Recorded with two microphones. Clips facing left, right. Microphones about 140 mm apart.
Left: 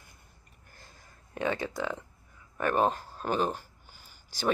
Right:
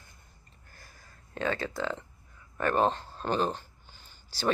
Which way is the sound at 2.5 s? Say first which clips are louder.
Even; 10° left (ahead or behind).